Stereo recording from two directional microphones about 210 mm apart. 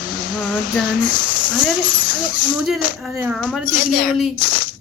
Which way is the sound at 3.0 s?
5° right (ahead or behind).